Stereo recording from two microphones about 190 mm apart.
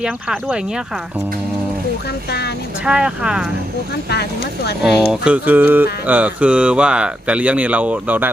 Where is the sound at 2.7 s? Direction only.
5° right (ahead or behind).